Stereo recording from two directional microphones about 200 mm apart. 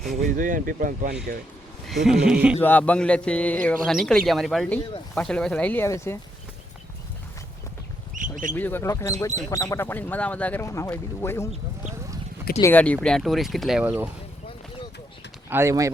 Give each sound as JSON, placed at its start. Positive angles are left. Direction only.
{"t": 0.3, "sound": "speech", "side_deg": -40}
{"t": 1.9, "sound": "speech", "side_deg": 0}
{"t": 2.6, "sound": "speech", "side_deg": 10}
{"t": 8.1, "sound": "bird", "side_deg": -40}
{"t": 8.5, "sound": "speech", "side_deg": 10}
{"t": 15.4, "sound": "speech", "side_deg": -10}